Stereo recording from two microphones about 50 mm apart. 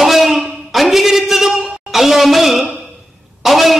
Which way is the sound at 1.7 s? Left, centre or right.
Centre.